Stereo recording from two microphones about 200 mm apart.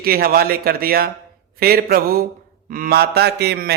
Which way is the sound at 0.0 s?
50° right (ahead or behind).